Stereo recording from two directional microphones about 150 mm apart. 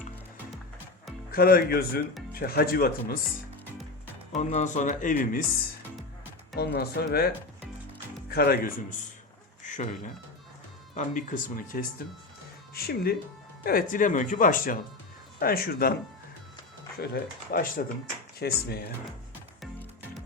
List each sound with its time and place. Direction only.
1.3 s speech: 85° left
4.4 s speech: 55° left (ahead or behind)
6.6 s speech: 90° left
9.6 s speech: 55° left (ahead or behind)
12.7 s speech: 90° left
13.7 s speech: 70° left (ahead or behind)
15.4 s speech: 85° left
17.0 s speech: 85° left